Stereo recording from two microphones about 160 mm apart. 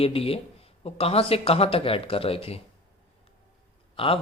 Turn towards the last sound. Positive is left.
turn(degrees=35)  # may be behind; listen again after turning